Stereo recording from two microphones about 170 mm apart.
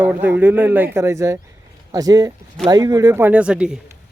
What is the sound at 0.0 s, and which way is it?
Speech, 10° right (ahead or behind).